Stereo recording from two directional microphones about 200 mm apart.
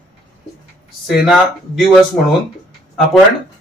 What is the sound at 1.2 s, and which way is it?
Speech, centre (ahead or behind).